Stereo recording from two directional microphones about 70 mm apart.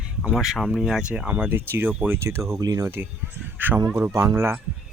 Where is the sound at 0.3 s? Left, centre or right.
Centre.